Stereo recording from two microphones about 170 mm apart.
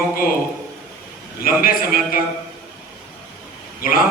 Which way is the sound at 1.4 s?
60° left (ahead or behind).